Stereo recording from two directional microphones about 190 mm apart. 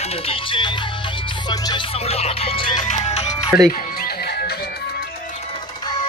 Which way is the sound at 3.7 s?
50° left (ahead or behind).